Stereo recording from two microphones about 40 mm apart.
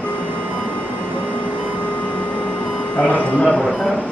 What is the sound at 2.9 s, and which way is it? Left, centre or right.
Music, left.